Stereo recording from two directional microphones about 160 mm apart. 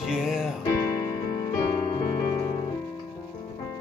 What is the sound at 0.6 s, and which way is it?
Music, 25° left (ahead or behind).